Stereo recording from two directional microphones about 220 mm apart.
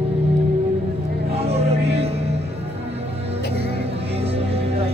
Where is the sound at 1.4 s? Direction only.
30° right (ahead or behind).